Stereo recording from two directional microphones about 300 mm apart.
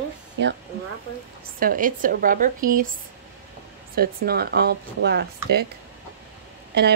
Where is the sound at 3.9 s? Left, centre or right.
Right.